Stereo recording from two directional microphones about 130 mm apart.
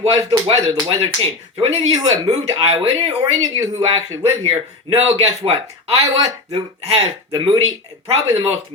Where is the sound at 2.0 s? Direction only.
55° right (ahead or behind).